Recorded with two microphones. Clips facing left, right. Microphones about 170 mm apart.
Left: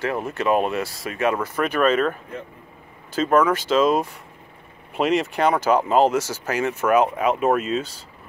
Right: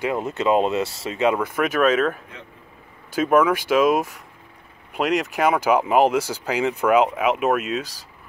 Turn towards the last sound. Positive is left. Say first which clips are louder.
# left 1 dB
turn(degrees=-5)  # may be behind; listen again after turning